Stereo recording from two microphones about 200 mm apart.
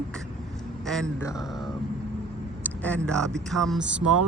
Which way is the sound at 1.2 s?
20° left (ahead or behind).